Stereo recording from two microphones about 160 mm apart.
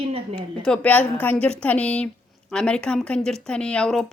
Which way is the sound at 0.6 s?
5° left (ahead or behind).